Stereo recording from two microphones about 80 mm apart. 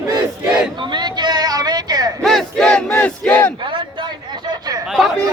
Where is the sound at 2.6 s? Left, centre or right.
Centre.